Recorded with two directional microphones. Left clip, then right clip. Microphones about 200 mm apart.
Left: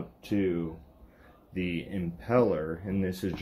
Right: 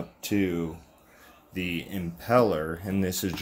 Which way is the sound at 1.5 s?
10° right (ahead or behind).